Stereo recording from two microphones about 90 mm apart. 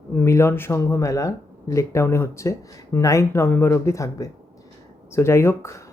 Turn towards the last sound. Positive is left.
turn(degrees=30)  # may be behind; listen again after turning